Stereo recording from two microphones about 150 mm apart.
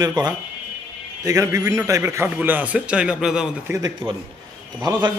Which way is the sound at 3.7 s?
25° right (ahead or behind).